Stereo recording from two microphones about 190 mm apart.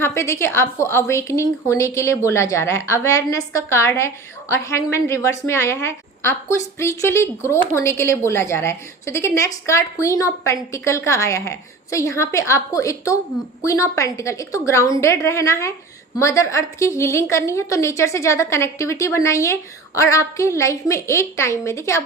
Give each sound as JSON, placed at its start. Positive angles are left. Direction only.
{"t": 0.0, "sound": "a woman's voice", "side_deg": 15}